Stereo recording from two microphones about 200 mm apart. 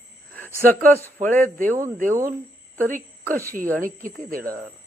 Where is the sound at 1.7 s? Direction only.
40° right (ahead or behind).